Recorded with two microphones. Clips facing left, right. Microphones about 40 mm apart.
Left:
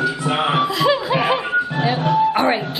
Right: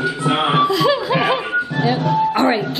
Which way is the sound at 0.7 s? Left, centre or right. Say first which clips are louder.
Right 1 dB; centre.